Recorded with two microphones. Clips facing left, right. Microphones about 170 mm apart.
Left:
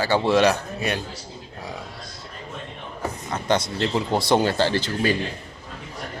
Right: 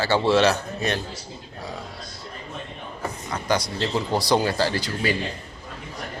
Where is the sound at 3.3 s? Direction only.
25° left (ahead or behind).